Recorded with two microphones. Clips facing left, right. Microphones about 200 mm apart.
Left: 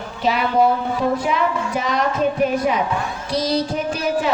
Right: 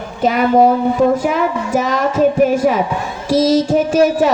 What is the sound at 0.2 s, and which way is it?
A woman's voice, 45° right (ahead or behind).